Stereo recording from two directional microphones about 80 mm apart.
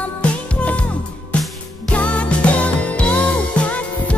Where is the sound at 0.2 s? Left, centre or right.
Centre.